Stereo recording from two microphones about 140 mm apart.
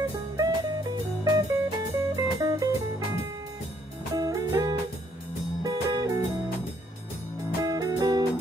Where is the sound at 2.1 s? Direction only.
25° right (ahead or behind).